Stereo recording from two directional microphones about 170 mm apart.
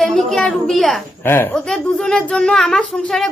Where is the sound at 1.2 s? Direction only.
10° left (ahead or behind).